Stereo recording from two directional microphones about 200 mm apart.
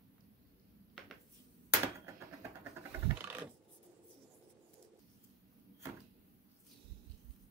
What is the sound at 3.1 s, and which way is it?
Computer keyboard, 10° right (ahead or behind).